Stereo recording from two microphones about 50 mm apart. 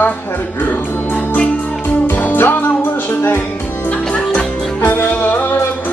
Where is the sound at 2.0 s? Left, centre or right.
Left.